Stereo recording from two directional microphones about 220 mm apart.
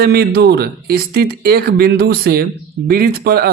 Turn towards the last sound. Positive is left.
turn(degrees=-45)  # may be behind; listen again after turning